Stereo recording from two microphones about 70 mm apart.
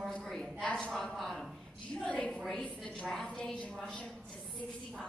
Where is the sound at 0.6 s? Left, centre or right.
Centre.